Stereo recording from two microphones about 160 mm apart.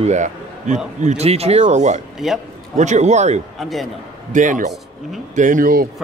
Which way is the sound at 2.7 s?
50° right (ahead or behind).